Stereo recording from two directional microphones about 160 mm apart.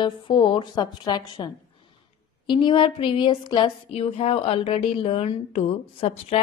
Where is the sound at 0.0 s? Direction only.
30° left (ahead or behind).